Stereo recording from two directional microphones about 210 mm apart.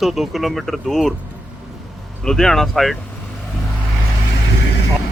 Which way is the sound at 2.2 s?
Centre (ahead or behind).